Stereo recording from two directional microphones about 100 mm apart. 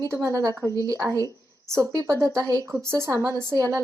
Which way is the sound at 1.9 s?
40° right (ahead or behind).